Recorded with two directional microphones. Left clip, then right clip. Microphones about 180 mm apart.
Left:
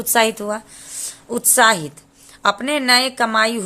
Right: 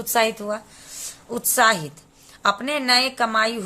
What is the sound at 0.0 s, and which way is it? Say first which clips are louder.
A woman's voice: left 4 dB; 25° left (ahead or behind).